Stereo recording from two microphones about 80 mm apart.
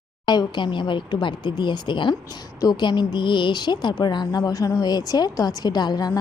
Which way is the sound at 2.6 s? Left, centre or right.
Left.